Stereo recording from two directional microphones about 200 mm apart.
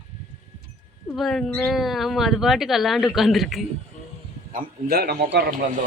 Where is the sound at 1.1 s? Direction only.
Centre (ahead or behind).